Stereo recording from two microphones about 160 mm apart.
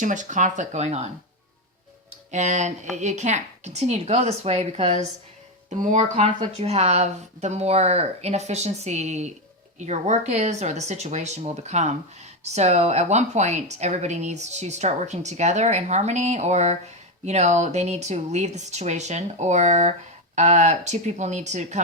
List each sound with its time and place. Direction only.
0.0 s a woman's voice: 50° right (ahead or behind)
2.3 s a woman's voice: 45° right (ahead or behind)